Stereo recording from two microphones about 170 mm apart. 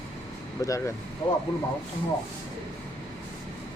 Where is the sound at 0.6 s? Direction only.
20° left (ahead or behind).